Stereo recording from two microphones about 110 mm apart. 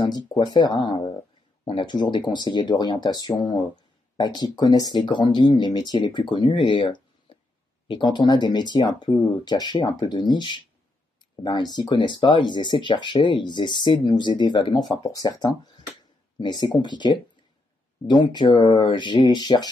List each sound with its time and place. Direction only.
0.5 s speech: 40° left (ahead or behind)